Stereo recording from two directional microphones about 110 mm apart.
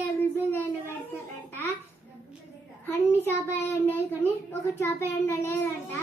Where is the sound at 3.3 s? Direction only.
25° left (ahead or behind).